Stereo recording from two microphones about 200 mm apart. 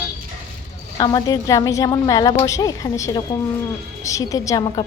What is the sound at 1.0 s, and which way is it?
A woman's voice, 20° left (ahead or behind).